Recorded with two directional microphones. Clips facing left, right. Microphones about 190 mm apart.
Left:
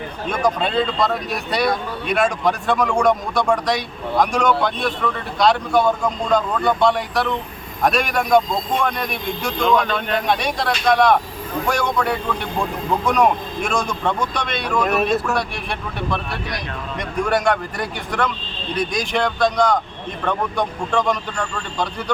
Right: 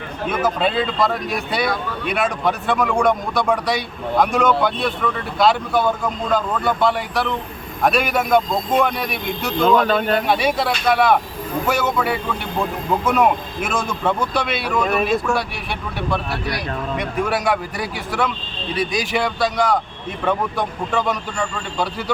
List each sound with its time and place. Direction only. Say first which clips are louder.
0.3 s speech: even; 5° right (ahead or behind)
9.8 s speech: right 5 dB; 35° right (ahead or behind)
10.2 s speech: right 2 dB; 5° right (ahead or behind)